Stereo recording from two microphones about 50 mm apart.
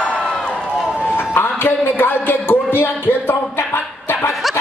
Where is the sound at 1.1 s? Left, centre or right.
Left.